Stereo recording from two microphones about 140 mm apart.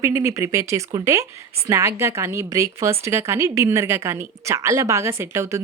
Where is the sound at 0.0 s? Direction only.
20° right (ahead or behind).